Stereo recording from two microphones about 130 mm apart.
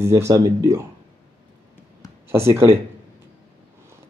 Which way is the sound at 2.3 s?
20° right (ahead or behind).